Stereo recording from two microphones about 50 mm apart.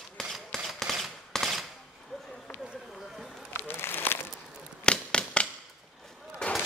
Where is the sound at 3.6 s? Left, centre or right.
Left.